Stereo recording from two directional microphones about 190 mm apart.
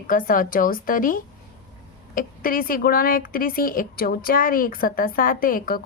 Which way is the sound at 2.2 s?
50° left (ahead or behind).